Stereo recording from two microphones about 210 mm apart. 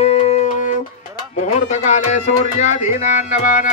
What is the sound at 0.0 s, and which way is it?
Music, 30° left (ahead or behind).